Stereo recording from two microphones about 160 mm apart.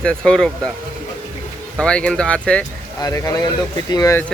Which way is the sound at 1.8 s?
5° left (ahead or behind).